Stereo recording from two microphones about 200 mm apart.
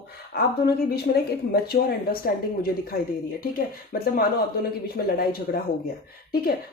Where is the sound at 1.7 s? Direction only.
50° left (ahead or behind).